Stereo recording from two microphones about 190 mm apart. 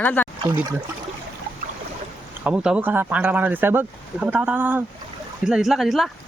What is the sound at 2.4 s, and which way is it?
Speech, 5° right (ahead or behind).